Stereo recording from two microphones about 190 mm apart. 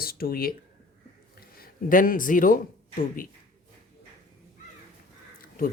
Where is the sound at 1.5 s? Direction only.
50° left (ahead or behind).